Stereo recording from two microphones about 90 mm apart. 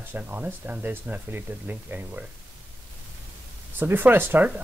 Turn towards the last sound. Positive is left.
turn(degrees=-20)  # may be behind; listen again after turning